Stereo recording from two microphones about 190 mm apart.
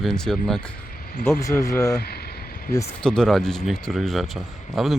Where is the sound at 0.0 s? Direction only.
5° left (ahead or behind).